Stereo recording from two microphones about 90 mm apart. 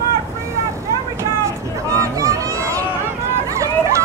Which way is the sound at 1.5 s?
35° right (ahead or behind).